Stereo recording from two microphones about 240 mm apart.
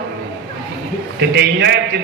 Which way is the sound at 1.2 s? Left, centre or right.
Right.